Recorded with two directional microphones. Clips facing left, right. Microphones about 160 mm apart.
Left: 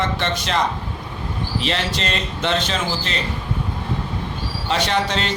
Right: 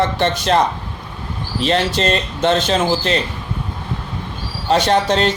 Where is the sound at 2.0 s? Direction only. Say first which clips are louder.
Right 7 dB; 40° right (ahead or behind).